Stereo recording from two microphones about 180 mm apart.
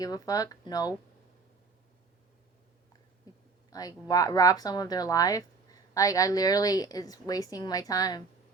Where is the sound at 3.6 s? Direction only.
20° left (ahead or behind).